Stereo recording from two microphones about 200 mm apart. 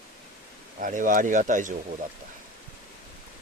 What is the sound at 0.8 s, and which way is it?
Speech, 40° right (ahead or behind).